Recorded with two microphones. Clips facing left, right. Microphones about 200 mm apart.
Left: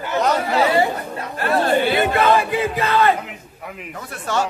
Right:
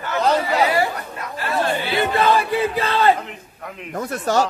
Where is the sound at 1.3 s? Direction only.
55° left (ahead or behind).